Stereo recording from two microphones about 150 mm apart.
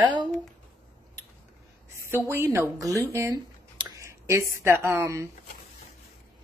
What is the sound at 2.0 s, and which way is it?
Speech, 15° right (ahead or behind).